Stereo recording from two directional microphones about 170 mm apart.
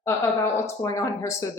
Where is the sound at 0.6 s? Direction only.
20° left (ahead or behind).